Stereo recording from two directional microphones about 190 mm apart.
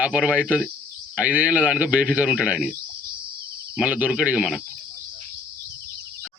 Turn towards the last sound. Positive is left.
turn(degrees=-5)  # may be behind; listen again after turning